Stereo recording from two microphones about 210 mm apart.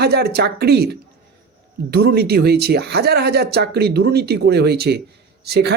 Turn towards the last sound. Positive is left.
turn(degrees=-50)  # may be behind; listen again after turning